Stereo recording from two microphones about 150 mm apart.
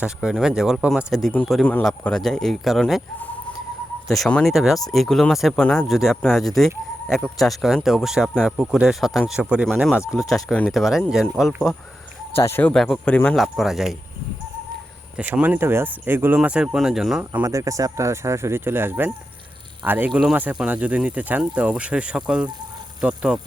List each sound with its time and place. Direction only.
0.0 s speech: 5° right (ahead or behind)
4.1 s speech: 5° left (ahead or behind)
10.3 s speech: 5° left (ahead or behind)
15.1 s speech: 10° right (ahead or behind)
17.4 s speech: 20° right (ahead or behind)